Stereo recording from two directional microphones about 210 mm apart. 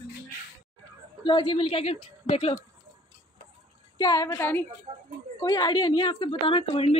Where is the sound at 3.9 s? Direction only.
20° left (ahead or behind).